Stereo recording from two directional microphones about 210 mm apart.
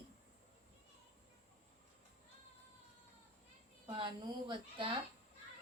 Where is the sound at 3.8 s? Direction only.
20° right (ahead or behind).